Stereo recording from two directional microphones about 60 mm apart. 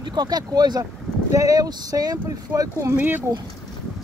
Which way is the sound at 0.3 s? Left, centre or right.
Right.